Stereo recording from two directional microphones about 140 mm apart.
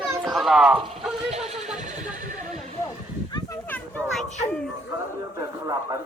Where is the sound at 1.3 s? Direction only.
50° right (ahead or behind).